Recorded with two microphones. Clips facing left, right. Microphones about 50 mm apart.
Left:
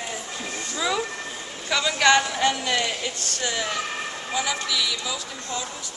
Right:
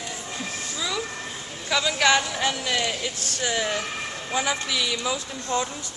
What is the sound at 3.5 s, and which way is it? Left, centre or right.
A man's voice, centre.